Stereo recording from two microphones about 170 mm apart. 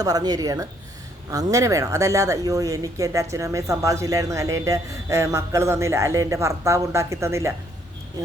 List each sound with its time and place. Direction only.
0.0 s speech: 20° right (ahead or behind)